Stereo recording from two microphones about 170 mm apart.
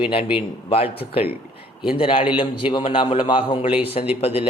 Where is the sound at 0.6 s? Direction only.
35° left (ahead or behind).